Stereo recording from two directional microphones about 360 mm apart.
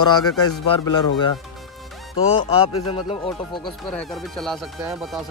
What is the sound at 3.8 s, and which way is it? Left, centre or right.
Speech, centre.